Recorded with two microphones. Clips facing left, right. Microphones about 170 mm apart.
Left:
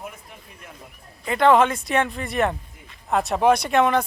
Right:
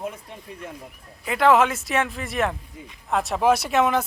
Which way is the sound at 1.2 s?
5° right (ahead or behind).